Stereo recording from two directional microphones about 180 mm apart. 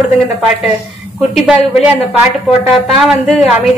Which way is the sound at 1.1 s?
Centre (ahead or behind).